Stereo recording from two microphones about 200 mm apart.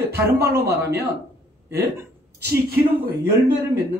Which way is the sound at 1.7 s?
15° right (ahead or behind).